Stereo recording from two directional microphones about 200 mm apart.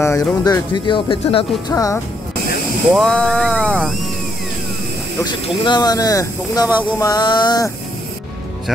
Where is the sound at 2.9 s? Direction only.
Centre (ahead or behind).